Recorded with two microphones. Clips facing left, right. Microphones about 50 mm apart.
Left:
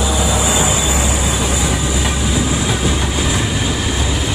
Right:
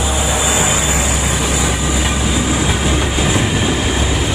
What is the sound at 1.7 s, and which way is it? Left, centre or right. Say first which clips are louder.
Train: right 1 dB; centre.